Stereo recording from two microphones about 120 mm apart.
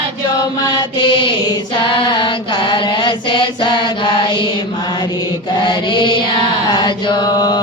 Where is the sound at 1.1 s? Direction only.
40° left (ahead or behind).